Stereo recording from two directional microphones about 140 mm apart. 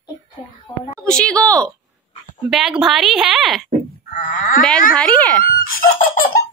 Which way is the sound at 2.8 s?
Centre (ahead or behind).